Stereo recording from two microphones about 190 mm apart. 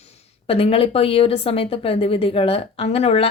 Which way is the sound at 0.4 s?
30° left (ahead or behind).